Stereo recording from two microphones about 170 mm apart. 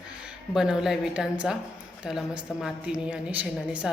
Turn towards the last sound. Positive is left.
turn(degrees=-5)  # may be behind; listen again after turning